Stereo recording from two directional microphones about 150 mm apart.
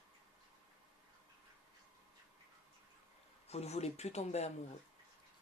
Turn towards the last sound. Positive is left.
turn(degrees=45)  # may be behind; listen again after turning